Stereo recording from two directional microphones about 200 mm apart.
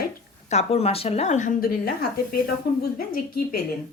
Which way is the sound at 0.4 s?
30° left (ahead or behind).